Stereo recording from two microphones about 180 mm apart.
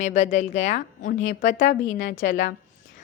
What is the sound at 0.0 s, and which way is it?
A woman's voice, 40° left (ahead or behind).